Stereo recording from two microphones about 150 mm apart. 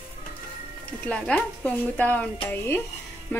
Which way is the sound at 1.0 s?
10° left (ahead or behind).